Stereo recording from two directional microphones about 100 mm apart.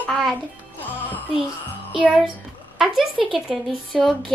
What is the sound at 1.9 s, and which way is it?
A child's voice, 10° right (ahead or behind).